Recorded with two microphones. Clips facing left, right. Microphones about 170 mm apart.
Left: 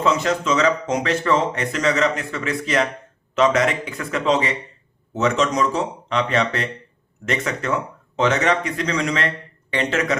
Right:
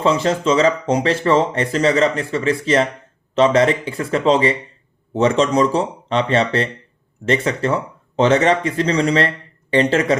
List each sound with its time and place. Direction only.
0.0 s speech: 30° right (ahead or behind)